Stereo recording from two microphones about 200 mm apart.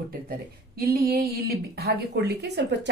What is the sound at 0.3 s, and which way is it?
A woman's voice, 50° right (ahead or behind).